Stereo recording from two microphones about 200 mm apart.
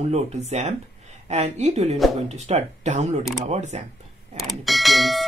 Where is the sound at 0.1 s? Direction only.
35° right (ahead or behind).